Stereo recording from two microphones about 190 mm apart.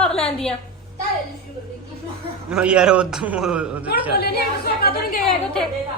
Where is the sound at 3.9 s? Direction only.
55° left (ahead or behind).